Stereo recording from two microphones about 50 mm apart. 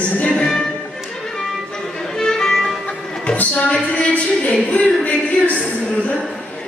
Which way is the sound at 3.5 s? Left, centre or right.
Left.